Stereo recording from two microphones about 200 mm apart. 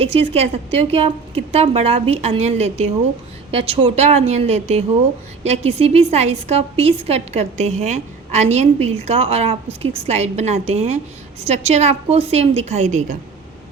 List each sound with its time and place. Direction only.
0.0 s a woman's voice: 30° right (ahead or behind)